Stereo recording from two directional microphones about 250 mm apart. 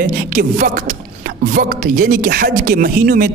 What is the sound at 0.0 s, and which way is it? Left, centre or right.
Speech, right.